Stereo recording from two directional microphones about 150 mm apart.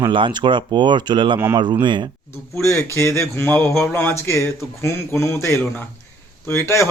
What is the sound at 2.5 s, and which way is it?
Speech, 20° left (ahead or behind).